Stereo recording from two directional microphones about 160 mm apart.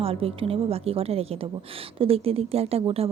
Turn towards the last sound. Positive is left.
turn(degrees=-35)  # may be behind; listen again after turning